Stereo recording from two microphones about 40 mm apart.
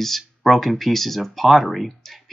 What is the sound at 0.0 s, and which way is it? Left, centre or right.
Speech, centre.